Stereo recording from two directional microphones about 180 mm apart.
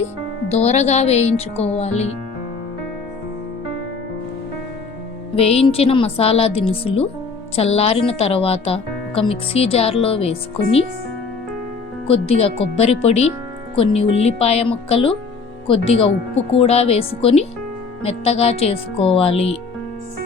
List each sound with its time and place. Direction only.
0.5 s a woman's voice: 35° left (ahead or behind)
5.4 s a woman's voice: 35° left (ahead or behind)
12.0 s a woman's voice: 35° left (ahead or behind)